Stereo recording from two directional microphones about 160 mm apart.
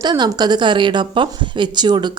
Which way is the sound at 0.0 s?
25° right (ahead or behind).